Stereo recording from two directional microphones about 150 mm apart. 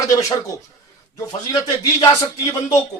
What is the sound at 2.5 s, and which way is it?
Speech, 20° left (ahead or behind).